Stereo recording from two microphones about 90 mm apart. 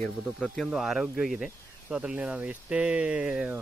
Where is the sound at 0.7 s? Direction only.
5° right (ahead or behind).